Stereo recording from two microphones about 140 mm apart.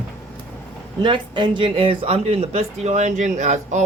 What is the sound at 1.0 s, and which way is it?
Speech, 35° right (ahead or behind).